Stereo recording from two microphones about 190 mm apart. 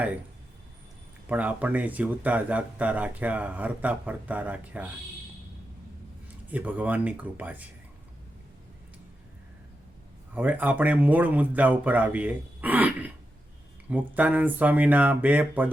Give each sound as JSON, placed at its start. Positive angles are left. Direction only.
{"t": 1.3, "sound": "speech", "side_deg": -10}
{"t": 6.5, "sound": "speech", "side_deg": -10}
{"t": 10.3, "sound": "speech", "side_deg": -10}